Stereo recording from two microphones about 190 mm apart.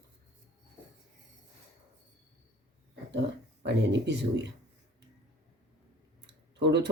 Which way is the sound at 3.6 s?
65° right (ahead or behind).